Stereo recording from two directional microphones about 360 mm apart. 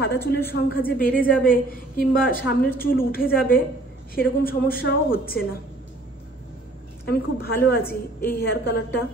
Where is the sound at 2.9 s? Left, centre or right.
Left.